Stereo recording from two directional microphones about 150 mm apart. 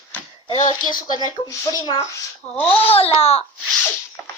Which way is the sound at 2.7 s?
40° left (ahead or behind).